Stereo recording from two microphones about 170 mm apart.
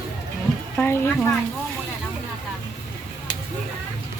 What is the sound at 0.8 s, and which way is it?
Speech, 15° left (ahead or behind).